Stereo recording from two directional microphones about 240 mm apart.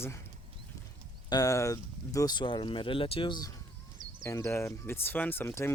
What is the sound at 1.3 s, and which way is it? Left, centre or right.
Speech, centre.